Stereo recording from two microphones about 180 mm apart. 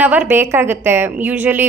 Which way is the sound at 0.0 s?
10° right (ahead or behind).